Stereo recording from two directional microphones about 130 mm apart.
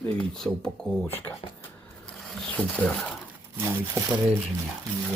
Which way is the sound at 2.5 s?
10° left (ahead or behind).